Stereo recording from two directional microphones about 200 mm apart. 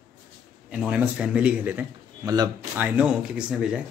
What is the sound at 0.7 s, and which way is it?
Speech, 5° right (ahead or behind).